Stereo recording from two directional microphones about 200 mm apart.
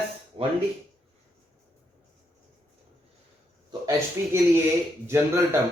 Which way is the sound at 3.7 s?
15° right (ahead or behind).